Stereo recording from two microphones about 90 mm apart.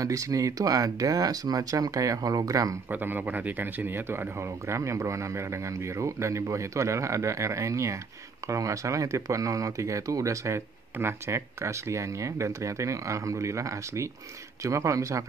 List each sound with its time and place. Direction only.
0.0 s speech: 35° right (ahead or behind)
2.9 s speech: 20° right (ahead or behind); by 15.2 s 35° right (ahead or behind)